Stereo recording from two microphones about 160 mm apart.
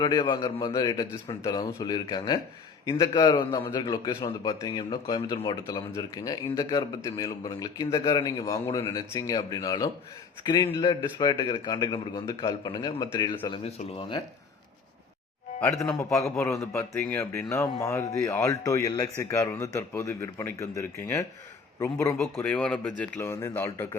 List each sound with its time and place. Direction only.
0.0 s speech: 25° left (ahead or behind)
16.3 s speech: 20° left (ahead or behind)
22.4 s speech: 5° left (ahead or behind)